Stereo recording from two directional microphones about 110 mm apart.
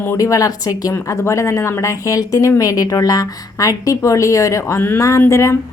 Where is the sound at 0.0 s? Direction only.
25° left (ahead or behind).